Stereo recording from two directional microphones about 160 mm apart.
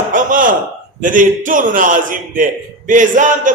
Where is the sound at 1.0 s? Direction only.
55° right (ahead or behind).